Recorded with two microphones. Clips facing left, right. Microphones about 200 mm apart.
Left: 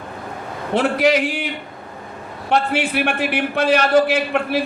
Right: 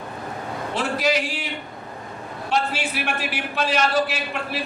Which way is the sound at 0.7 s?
60° left (ahead or behind).